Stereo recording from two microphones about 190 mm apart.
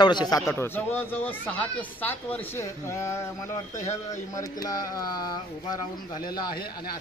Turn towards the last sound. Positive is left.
turn(degrees=20)  # may be behind; listen again after turning